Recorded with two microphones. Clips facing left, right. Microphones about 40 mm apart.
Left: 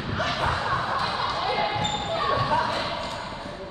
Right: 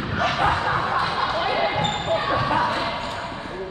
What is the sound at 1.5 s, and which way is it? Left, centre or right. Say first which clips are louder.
Basketball bounce: right 3 dB; right.